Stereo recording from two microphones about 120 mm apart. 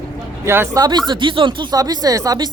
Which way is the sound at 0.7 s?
35° right (ahead or behind).